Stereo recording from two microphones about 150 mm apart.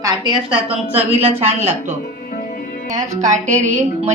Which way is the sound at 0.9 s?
45° right (ahead or behind).